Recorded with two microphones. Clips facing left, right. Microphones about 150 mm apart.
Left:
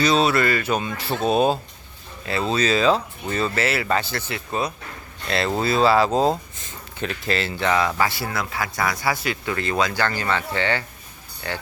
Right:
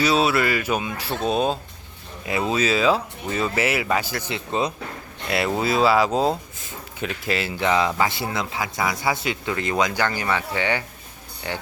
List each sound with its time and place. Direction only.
0.0 s speech: 5° right (ahead or behind)
2.2 s speech: 10° right (ahead or behind)